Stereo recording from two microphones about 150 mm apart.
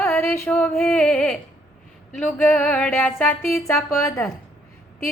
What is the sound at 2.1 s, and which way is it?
Speech, 10° left (ahead or behind).